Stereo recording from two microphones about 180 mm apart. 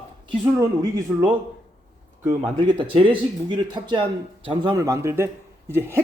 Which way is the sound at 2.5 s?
30° right (ahead or behind).